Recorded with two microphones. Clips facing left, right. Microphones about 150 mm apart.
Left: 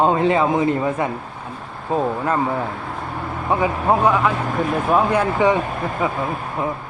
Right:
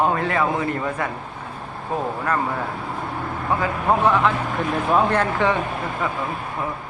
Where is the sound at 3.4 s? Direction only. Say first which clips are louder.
Left 3 dB; 15° left (ahead or behind).